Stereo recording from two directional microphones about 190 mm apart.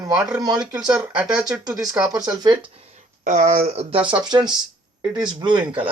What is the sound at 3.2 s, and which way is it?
Speech, 40° right (ahead or behind).